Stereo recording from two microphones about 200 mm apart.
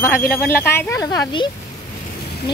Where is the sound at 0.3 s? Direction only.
10° left (ahead or behind).